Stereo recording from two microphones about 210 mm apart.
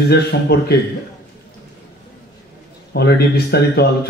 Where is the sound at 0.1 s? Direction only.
50° left (ahead or behind).